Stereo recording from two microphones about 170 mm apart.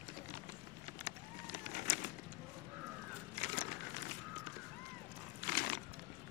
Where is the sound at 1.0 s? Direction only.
50° left (ahead or behind).